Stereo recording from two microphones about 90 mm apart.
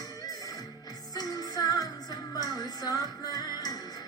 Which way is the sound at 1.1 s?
45° left (ahead or behind).